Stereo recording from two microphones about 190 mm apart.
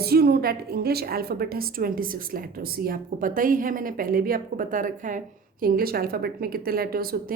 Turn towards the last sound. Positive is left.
turn(degrees=-50)  # may be behind; listen again after turning